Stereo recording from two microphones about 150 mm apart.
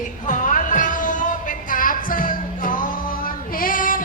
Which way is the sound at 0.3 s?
60° left (ahead or behind).